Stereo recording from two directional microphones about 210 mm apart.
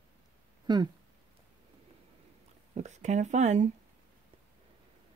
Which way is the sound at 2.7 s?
35° right (ahead or behind).